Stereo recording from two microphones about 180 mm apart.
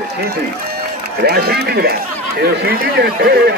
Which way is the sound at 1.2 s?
60° right (ahead or behind).